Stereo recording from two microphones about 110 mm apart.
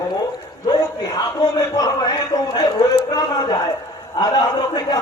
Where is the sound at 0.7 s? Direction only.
40° left (ahead or behind).